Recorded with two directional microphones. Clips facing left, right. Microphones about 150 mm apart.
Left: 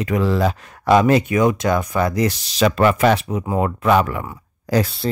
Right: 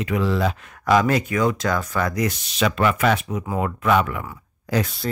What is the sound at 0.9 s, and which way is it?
Speech, 25° left (ahead or behind).